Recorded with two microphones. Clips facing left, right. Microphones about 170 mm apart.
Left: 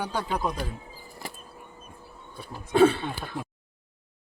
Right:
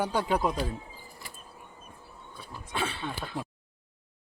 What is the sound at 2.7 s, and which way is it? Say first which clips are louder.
Speech: left 13 dB; 50° left (ahead or behind).